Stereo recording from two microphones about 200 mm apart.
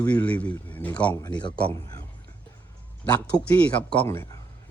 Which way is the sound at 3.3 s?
10° left (ahead or behind).